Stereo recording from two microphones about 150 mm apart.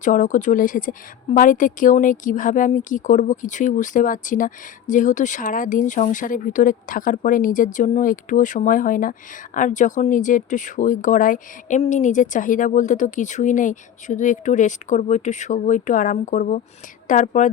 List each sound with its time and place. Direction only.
0.0 s a woman's voice: 60° left (ahead or behind)